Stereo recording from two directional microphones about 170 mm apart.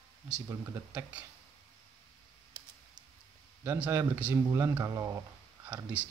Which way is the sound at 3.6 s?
10° right (ahead or behind).